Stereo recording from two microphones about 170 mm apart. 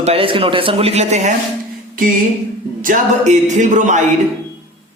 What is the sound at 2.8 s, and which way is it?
A woman's voice, 45° right (ahead or behind).